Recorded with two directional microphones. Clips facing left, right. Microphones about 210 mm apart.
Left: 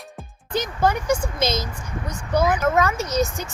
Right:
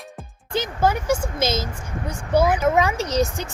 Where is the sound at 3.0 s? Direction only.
35° right (ahead or behind).